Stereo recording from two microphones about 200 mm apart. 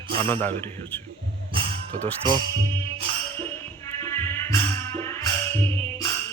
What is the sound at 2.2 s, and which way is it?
Speech, 20° right (ahead or behind).